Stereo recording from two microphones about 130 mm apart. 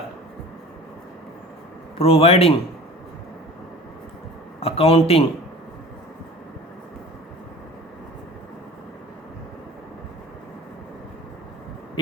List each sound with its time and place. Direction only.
2.0 s a man's voice: 50° left (ahead or behind)
4.6 s a man's voice: 50° left (ahead or behind)